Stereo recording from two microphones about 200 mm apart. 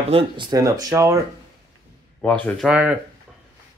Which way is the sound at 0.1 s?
20° right (ahead or behind).